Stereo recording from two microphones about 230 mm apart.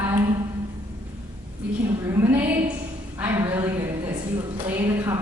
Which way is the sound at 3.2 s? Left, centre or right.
Centre.